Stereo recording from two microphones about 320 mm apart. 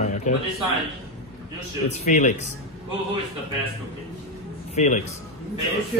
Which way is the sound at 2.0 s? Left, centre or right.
Left.